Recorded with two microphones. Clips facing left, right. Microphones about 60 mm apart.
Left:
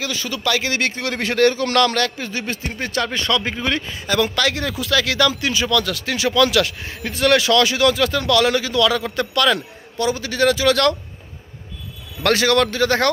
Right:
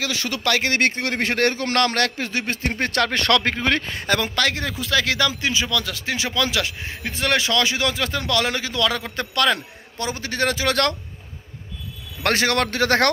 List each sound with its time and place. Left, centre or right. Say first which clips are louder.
0.0 s a man's voice: left 1 dB; right
2.0 s speech: even; right
2.4 s a man's voice: right 2 dB; right
3.5 s a man's voice: right 1 dB; right
4.2 s a man's voice: left 3 dB; right
12.2 s speech: left 4 dB; right
12.7 s speech: left 1 dB; right